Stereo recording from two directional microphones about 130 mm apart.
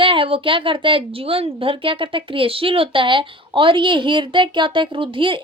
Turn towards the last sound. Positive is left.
turn(degrees=-40)  # may be behind; listen again after turning